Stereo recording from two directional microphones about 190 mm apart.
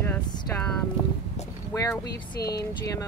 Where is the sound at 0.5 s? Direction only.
10° left (ahead or behind).